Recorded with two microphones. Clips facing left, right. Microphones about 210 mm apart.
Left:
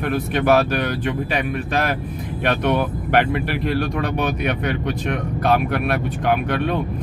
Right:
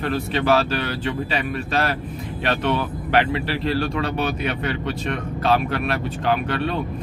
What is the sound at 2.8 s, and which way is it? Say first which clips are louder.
Speech: left 2 dB; 55° left (ahead or behind).